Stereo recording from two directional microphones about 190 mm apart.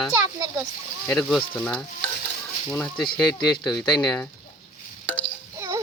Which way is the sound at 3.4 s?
20° left (ahead or behind).